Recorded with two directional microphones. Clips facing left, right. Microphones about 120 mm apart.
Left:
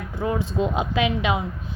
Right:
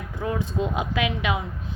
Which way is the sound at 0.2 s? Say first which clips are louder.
Left 3 dB; 25° left (ahead or behind).